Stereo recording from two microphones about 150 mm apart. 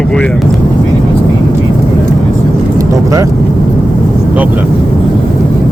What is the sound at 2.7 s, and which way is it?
Vehicle, 20° right (ahead or behind).